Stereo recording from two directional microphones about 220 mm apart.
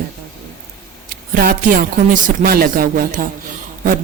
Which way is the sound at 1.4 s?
40° right (ahead or behind).